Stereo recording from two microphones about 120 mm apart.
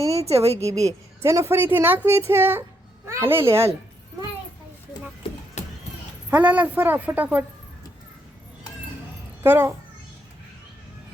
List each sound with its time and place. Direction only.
0.0 s a sound: 25° right (ahead or behind)
0.3 s a woman's voice: 60° right (ahead or behind)
0.9 s speech: 25° right (ahead or behind)
5.6 s a sound: 70° left (ahead or behind)
6.3 s a woman's voice: 10° right (ahead or behind)
9.4 s speech: 20° right (ahead or behind)